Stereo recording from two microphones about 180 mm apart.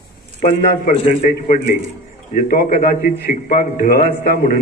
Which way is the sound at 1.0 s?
50° left (ahead or behind).